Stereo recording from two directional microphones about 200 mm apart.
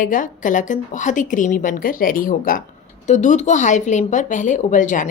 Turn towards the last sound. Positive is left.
turn(degrees=40)  # may be behind; listen again after turning